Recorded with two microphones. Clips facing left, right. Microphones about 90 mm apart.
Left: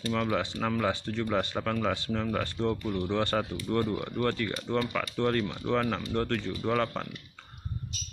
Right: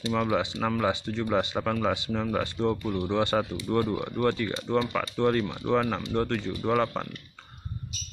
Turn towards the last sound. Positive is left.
turn(degrees=-15)  # may be behind; listen again after turning